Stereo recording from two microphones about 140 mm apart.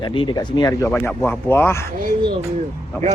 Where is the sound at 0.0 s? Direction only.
35° left (ahead or behind).